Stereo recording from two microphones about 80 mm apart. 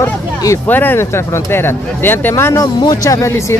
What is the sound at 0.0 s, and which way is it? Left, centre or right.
Speech, left.